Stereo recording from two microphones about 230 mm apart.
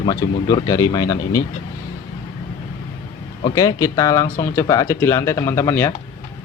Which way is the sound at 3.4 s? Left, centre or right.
Centre.